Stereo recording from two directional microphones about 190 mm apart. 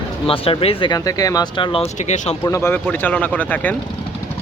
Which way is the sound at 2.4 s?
15° left (ahead or behind).